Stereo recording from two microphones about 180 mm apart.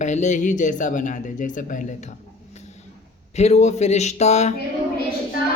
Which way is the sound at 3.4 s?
35° left (ahead or behind).